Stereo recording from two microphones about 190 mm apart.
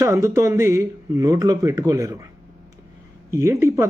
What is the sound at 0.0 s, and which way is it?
Speech, 15° right (ahead or behind).